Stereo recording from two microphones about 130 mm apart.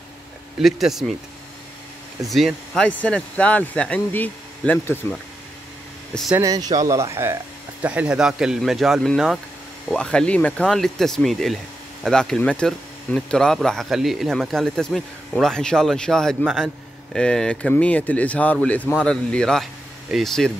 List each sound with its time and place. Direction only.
0.6 s speech: centre (ahead or behind)
2.2 s speech: centre (ahead or behind)
6.4 s speech: 30° right (ahead or behind)
7.8 s speech: 10° right (ahead or behind)